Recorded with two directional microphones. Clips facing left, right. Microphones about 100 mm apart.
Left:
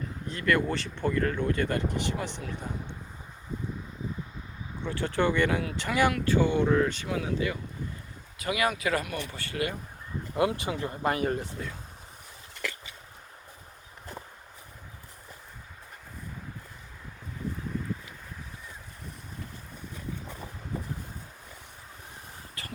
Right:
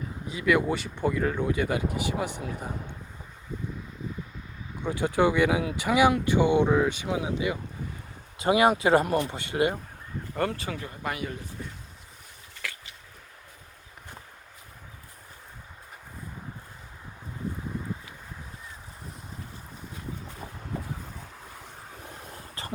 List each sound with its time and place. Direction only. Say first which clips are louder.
0.3 s speech: right 2 dB; 5° right (ahead or behind)
4.8 s speech: right 4 dB; 15° right (ahead or behind)
8.4 s speech: right 7 dB; 25° right (ahead or behind)
9.3 s speech: right 6 dB; 20° right (ahead or behind)
10.3 s speech: left 2 dB; 15° left (ahead or behind); by 11.3 s 30° left (ahead or behind)
11.3 s speech: left 7 dB; 65° left (ahead or behind)
22.6 s a sound: right 5 dB; 30° right (ahead or behind)